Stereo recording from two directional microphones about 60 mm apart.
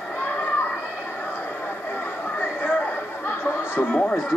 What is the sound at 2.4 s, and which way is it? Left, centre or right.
Chatter, left.